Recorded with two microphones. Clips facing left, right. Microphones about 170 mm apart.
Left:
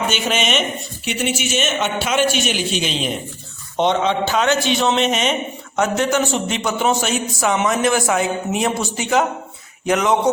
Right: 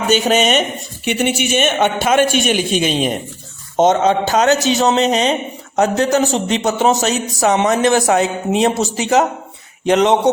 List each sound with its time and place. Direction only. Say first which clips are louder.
0.1 s a man's voice: right 7 dB; 40° right (ahead or behind)
1.0 s a man's voice: right 5 dB; 60° right (ahead or behind); by 10.2 s 30° right (ahead or behind)